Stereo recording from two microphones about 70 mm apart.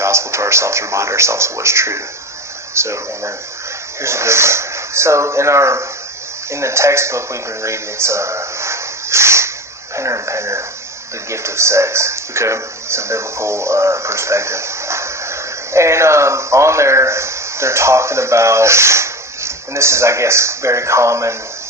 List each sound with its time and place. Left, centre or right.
0.0 s speech: right
9.9 s a sound: right
11.3 s speech: right